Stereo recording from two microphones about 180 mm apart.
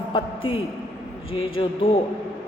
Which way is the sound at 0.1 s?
30° left (ahead or behind).